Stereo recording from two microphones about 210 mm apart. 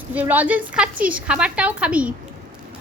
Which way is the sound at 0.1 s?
10° right (ahead or behind).